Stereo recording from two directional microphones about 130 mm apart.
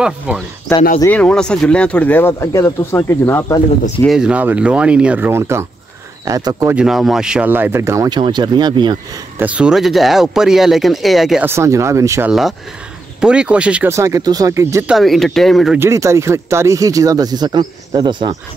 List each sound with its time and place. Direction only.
0.3 s speech: 5° right (ahead or behind)
1.0 s speech: 10° left (ahead or behind)
4.1 s speech: 5° right (ahead or behind); by 6.7 s 25° right (ahead or behind)
6.7 s speech: 5° right (ahead or behind); by 8.1 s 20° right (ahead or behind)
8.1 s speech: 35° right (ahead or behind)
9.4 s speech: 10° right (ahead or behind)
11.4 s speech: 20° right (ahead or behind)
12.3 s speech: centre (ahead or behind)
13.8 s speech: 25° right (ahead or behind)
14.9 s speech: centre (ahead or behind)
15.8 s speech: 20° right (ahead or behind)